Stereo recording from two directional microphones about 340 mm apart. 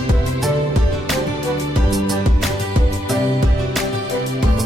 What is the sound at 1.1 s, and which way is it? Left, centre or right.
Music, centre.